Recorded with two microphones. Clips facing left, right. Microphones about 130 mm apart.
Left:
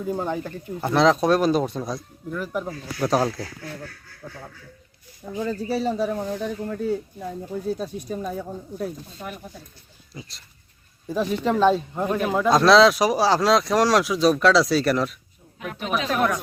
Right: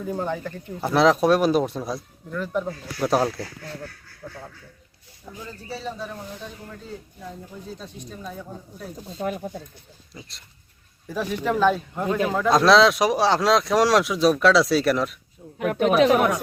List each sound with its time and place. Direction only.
0.0 s speech: 15° left (ahead or behind)
0.8 s speech: 5° right (ahead or behind)
2.3 s speech: 10° left (ahead or behind)
3.0 s speech: 5° right (ahead or behind)
5.4 s speech: 80° left; by 6.9 s 65° left (ahead or behind)
7.8 s speech: 50° left (ahead or behind)
9.2 s speech: 35° right (ahead or behind)
10.2 s speech: centre (ahead or behind)
11.1 s speech: 20° left (ahead or behind)
12.5 s speech: centre (ahead or behind)
15.5 s speech: 65° right (ahead or behind)